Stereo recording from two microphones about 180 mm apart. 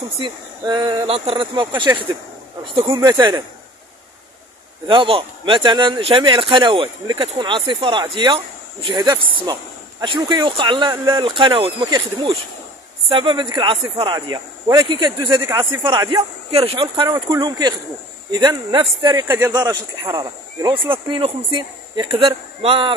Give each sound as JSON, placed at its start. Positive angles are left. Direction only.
{"t": 0.2, "sound": "a man's voice", "side_deg": -25}
{"t": 2.9, "sound": "a man's voice", "side_deg": -15}
{"t": 4.8, "sound": "a man's voice", "side_deg": -30}
{"t": 16.8, "sound": "a man's voice", "side_deg": -20}
{"t": 19.2, "sound": "speech", "side_deg": -10}
{"t": 19.5, "sound": "a man's voice", "side_deg": -20}